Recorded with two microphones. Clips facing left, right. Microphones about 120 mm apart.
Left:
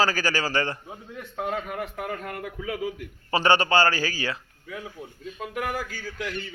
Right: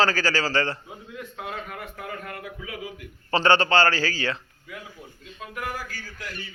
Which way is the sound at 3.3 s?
15° left (ahead or behind).